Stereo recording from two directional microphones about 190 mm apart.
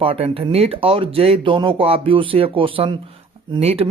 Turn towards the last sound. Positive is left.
turn(degrees=-30)  # may be behind; listen again after turning